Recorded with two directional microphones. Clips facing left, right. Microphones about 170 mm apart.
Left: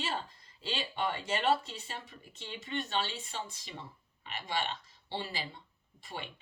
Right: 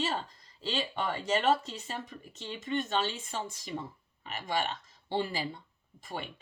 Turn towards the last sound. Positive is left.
turn(degrees=-45)  # may be behind; listen again after turning